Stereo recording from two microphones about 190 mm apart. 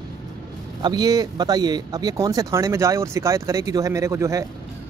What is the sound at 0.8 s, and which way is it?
Speech, 20° right (ahead or behind).